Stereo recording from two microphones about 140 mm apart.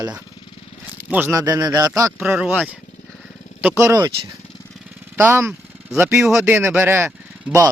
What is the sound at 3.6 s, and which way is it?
Speech, 20° right (ahead or behind).